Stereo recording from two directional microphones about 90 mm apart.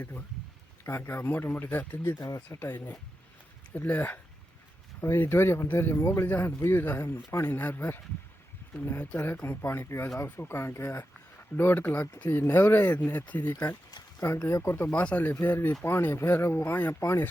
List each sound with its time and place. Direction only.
0.9 s speech: 30° left (ahead or behind)
2.2 s speech: 40° left (ahead or behind)
2.6 s speech: 25° left (ahead or behind)